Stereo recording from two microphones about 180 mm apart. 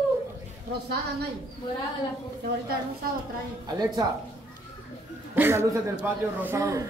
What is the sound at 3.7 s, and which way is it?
Speech, 25° right (ahead or behind).